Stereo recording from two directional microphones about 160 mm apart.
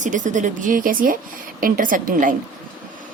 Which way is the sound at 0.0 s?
50° right (ahead or behind).